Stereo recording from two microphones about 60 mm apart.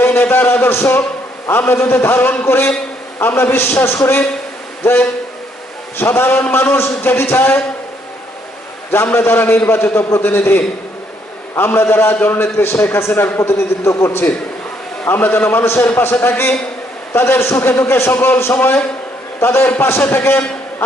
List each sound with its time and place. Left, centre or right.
0.0 s a man's voice: left
9.1 s a man's voice: left
13.5 s a man's voice: left
17.1 s a man's voice: left